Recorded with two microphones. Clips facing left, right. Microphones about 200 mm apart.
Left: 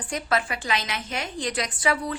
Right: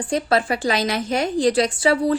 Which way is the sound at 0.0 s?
30° right (ahead or behind).